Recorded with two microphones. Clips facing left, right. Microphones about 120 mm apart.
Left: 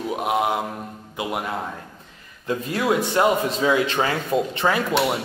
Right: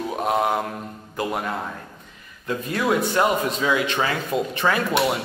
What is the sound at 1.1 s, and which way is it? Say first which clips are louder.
Speech: right 1 dB; 10° left (ahead or behind).